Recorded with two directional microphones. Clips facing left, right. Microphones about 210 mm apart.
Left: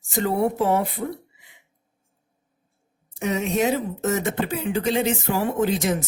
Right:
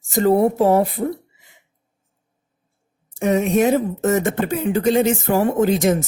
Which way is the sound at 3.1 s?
50° right (ahead or behind).